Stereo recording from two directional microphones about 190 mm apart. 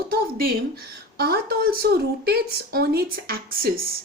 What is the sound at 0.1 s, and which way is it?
Speech, 50° right (ahead or behind).